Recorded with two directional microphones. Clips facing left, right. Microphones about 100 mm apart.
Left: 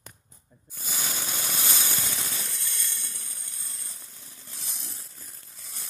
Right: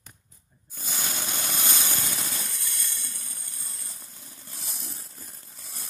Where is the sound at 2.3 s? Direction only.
20° right (ahead or behind).